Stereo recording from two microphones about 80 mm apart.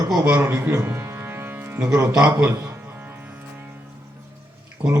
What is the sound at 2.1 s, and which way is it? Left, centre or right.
Speech, centre.